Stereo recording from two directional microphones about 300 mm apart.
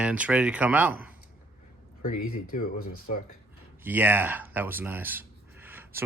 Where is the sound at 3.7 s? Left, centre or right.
Centre.